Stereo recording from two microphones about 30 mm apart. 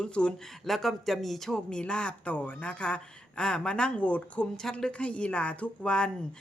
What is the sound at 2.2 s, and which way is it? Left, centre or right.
A woman's voice, left.